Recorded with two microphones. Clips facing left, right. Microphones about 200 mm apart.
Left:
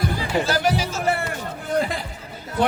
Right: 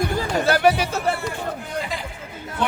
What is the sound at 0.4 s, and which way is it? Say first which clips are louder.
Music: right 4 dB; 60° right (ahead or behind).